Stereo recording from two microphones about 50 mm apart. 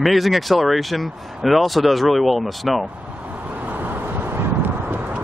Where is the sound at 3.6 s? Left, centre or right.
Right.